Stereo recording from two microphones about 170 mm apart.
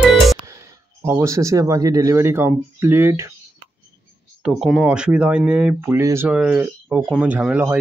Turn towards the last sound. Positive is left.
turn(degrees=-10)  # may be behind; listen again after turning